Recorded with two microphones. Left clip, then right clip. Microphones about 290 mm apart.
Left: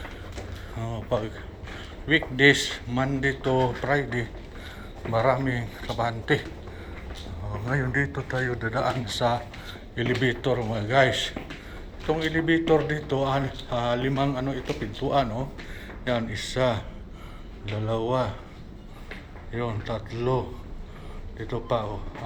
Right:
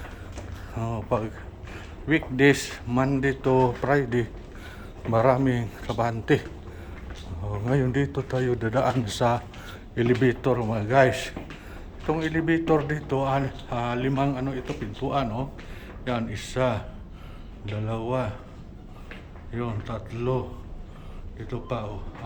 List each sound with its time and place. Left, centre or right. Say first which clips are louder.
2.0 s a man's voice: left 1 dB; centre
7.6 s a man's voice: right 1 dB; right; by 18.3 s centre
19.5 s a man's voice: left 2 dB; centre
21.4 s a man's voice: left 5 dB; centre